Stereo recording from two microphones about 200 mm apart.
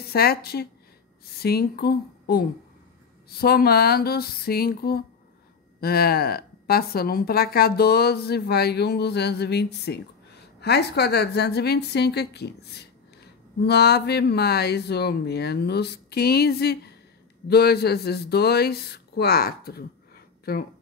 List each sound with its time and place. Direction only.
0.1 s a woman's voice: 50° left (ahead or behind)